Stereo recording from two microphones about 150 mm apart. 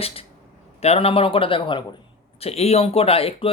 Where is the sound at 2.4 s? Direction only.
45° left (ahead or behind).